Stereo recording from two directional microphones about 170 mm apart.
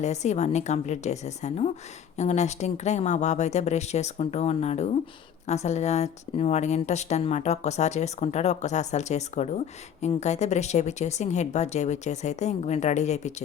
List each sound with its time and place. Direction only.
0.0 s a woman's voice: 40° left (ahead or behind)